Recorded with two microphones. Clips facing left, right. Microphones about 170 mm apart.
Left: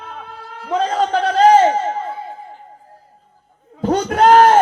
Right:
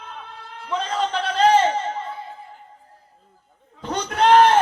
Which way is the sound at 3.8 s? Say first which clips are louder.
Left 7 dB; 40° left (ahead or behind).